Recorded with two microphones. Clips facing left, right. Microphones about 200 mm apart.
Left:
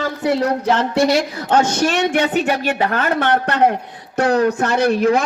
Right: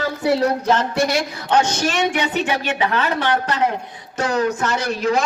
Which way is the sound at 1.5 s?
55° left (ahead or behind).